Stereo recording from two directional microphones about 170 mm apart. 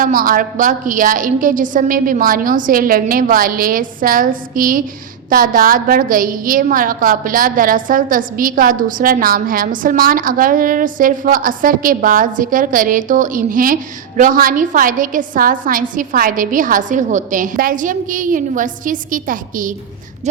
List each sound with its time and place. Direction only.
0.0 s a woman's voice: 55° right (ahead or behind)